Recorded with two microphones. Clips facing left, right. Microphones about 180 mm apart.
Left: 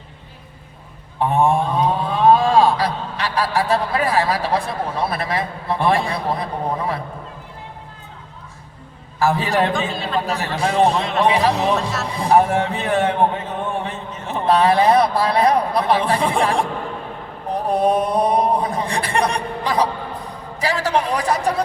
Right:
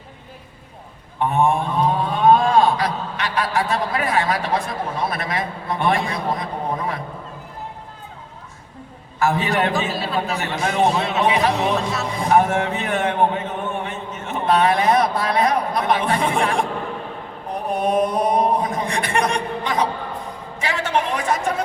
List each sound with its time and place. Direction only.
1.2 s a man's voice: 35° left (ahead or behind)
9.1 s a man's voice: 30° left (ahead or behind)
9.5 s a man's voice: centre (ahead or behind)
10.3 s a man's voice: 30° left (ahead or behind)
10.9 s a man's voice: 5° right (ahead or behind)
11.3 s a man's voice: 35° left (ahead or behind)
11.7 s a man's voice: centre (ahead or behind)
12.0 s a man's voice: 30° left (ahead or behind)
17.5 s a sound: 30° left (ahead or behind)
20.6 s a man's voice: 35° left (ahead or behind)